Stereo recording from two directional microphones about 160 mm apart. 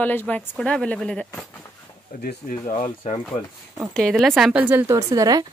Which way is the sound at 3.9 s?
Centre (ahead or behind).